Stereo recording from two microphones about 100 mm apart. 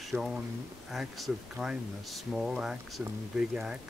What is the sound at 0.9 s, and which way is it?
Speech, 5° right (ahead or behind).